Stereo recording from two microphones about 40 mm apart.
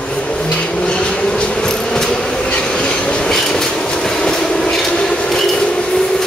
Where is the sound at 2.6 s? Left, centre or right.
Left.